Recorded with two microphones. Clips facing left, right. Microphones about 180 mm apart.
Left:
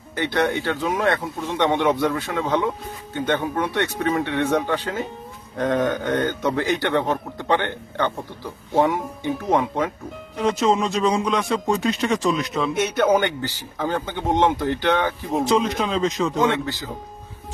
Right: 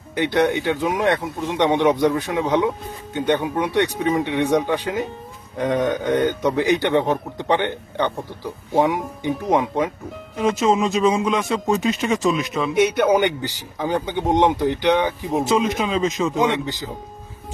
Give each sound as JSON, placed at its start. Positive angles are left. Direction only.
{"t": 0.1, "sound": "speech", "side_deg": -15}
{"t": 10.3, "sound": "speech", "side_deg": 0}
{"t": 12.7, "sound": "speech", "side_deg": -15}
{"t": 15.4, "sound": "speech", "side_deg": -5}
{"t": 16.3, "sound": "speech", "side_deg": -15}